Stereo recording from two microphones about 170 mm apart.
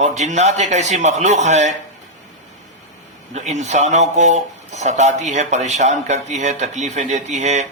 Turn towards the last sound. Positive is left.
turn(degrees=-40)  # may be behind; listen again after turning